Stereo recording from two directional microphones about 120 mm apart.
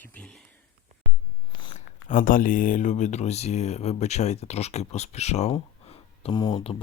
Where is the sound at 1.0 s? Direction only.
90° left.